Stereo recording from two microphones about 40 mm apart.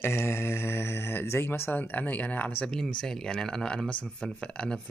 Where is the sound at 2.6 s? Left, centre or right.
Left.